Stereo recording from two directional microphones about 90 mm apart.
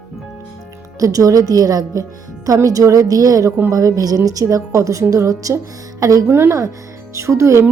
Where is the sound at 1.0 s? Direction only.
40° right (ahead or behind).